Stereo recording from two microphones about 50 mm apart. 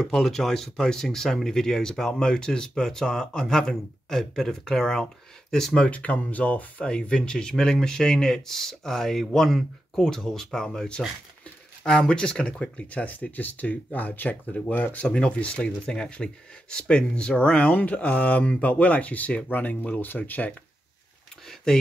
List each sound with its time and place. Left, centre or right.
0.0 s speech: centre
5.8 s speech: left
6.9 s speech: centre
13.0 s speech: left
15.0 s speech: centre; by 20.5 s left
21.7 s speech: centre